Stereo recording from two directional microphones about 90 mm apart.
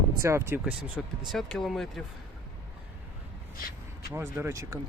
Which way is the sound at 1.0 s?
5° left (ahead or behind).